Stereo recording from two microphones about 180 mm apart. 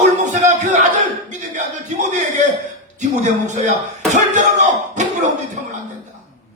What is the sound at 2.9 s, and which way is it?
Speech, 40° right (ahead or behind).